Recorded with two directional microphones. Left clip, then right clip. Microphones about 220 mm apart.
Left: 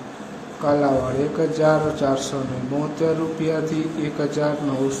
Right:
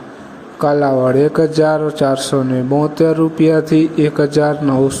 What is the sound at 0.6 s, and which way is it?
A man's voice, 30° right (ahead or behind).